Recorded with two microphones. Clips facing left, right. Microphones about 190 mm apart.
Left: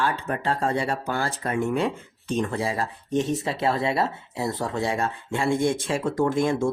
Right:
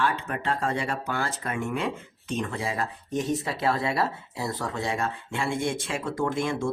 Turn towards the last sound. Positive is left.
turn(degrees=40)  # may be behind; listen again after turning